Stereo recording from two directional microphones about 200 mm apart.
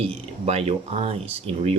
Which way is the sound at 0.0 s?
30° right (ahead or behind).